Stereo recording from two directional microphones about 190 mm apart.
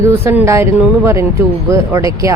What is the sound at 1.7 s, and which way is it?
Speech, 15° right (ahead or behind).